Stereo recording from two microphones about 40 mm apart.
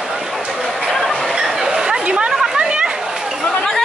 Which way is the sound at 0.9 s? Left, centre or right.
Centre.